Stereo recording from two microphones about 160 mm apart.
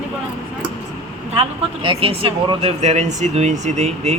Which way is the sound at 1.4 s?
35° right (ahead or behind).